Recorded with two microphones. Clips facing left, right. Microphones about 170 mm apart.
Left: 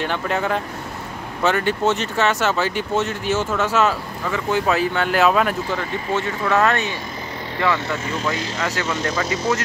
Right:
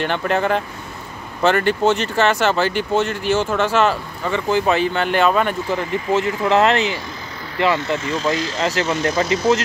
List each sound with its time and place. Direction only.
0.0 s speech: centre (ahead or behind)
6.4 s speech: 25° right (ahead or behind)
8.5 s speech: 30° right (ahead or behind)